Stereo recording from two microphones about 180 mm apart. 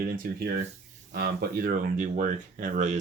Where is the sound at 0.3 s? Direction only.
55° right (ahead or behind).